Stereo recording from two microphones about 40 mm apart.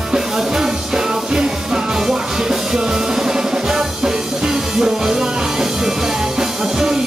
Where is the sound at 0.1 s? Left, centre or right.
Centre.